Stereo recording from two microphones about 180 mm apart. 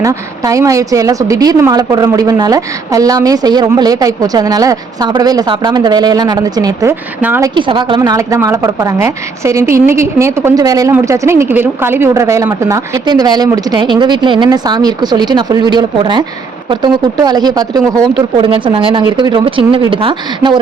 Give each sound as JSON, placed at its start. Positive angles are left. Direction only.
{"t": 0.0, "sound": "a woman's voice", "side_deg": -20}
{"t": 7.5, "sound": "a woman's voice", "side_deg": -25}